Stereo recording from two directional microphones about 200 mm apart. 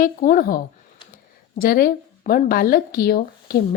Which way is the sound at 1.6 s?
45° left (ahead or behind).